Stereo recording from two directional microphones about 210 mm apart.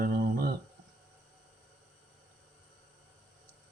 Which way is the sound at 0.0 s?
45° right (ahead or behind).